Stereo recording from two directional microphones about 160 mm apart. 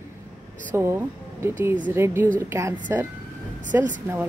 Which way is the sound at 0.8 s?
15° right (ahead or behind).